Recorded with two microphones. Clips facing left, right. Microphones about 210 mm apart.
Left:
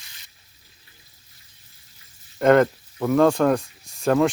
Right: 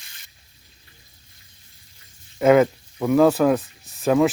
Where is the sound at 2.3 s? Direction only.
5° right (ahead or behind).